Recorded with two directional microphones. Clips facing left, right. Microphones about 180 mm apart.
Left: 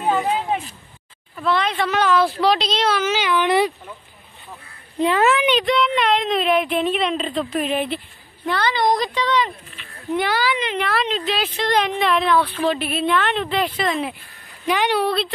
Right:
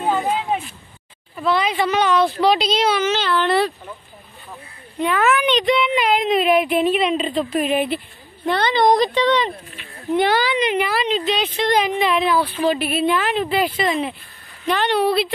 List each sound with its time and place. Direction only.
1.4 s speech: centre (ahead or behind)
3.2 s speech: 15° left (ahead or behind)
4.9 s a child's voice: 35° left (ahead or behind)
5.5 s speech: centre (ahead or behind)
8.5 s speech: 20° right (ahead or behind)
10.8 s speech: centre (ahead or behind)